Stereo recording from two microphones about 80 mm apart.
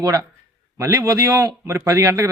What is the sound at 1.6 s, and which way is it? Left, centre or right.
Speech, right.